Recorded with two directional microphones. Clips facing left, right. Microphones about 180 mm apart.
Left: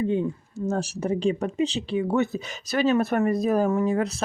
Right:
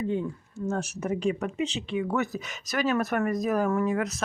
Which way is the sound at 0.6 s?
35° left (ahead or behind).